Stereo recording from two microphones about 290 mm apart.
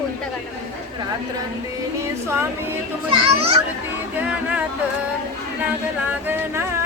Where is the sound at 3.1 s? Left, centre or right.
Centre.